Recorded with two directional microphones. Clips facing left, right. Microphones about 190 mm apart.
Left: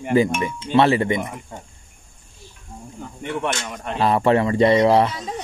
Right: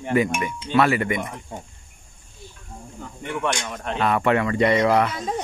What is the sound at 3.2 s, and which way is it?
Speech, 20° left (ahead or behind).